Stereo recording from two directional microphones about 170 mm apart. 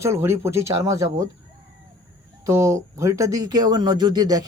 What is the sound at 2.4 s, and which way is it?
Speech, 15° right (ahead or behind).